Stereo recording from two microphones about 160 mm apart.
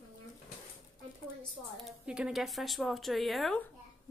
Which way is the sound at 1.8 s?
5° right (ahead or behind).